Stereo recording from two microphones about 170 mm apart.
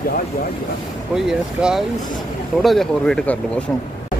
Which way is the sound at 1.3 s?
Centre (ahead or behind).